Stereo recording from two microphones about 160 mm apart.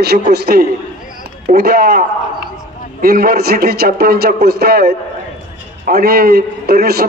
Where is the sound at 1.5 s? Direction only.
70° right (ahead or behind).